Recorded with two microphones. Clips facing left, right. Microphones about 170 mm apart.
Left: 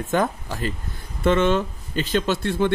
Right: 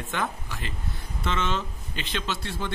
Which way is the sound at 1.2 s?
55° left (ahead or behind).